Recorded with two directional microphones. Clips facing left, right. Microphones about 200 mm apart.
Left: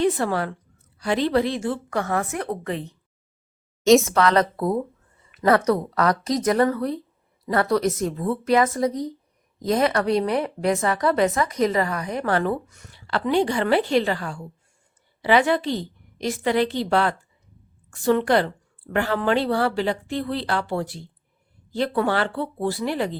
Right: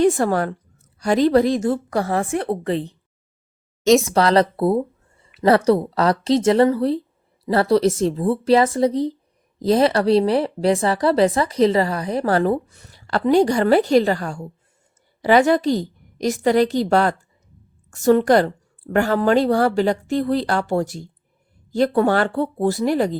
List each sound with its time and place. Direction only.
0.0 s a woman's voice: 45° right (ahead or behind)
4.1 s a woman's voice: 30° right (ahead or behind)